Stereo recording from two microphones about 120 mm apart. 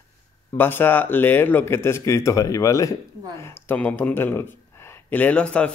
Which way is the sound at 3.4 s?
15° left (ahead or behind).